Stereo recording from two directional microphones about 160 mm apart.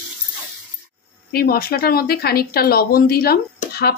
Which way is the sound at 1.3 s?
75° left (ahead or behind).